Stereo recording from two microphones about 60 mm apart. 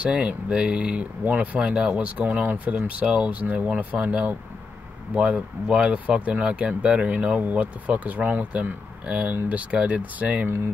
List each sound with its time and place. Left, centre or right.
0.0 s speech: centre